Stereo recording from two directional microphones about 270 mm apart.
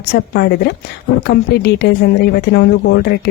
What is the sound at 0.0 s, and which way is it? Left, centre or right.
Speech, left.